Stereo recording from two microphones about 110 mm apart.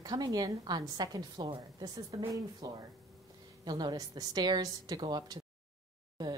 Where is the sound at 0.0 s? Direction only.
35° right (ahead or behind).